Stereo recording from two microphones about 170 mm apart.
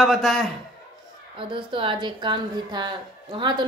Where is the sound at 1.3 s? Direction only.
30° right (ahead or behind).